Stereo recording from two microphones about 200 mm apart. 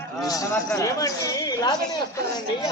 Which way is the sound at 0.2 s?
20° left (ahead or behind).